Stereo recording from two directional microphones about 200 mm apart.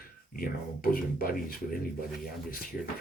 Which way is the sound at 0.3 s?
45° left (ahead or behind).